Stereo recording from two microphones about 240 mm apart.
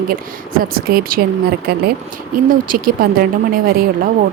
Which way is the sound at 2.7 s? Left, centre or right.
Right.